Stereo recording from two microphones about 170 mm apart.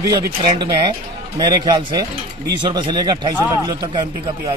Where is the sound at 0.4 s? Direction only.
25° right (ahead or behind).